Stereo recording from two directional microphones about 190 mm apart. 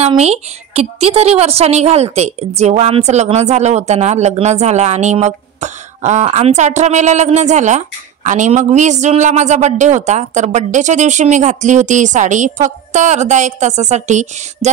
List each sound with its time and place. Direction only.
0.2 s a woman's voice: 35° right (ahead or behind)